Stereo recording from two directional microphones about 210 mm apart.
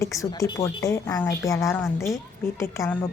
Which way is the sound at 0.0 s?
15° left (ahead or behind).